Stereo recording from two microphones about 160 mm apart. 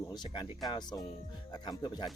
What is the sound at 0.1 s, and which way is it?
Speech, 25° left (ahead or behind).